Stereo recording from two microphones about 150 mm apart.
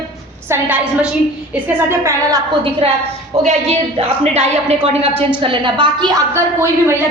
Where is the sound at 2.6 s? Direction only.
35° right (ahead or behind).